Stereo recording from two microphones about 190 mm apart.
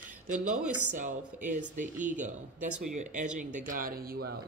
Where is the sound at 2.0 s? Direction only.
40° right (ahead or behind).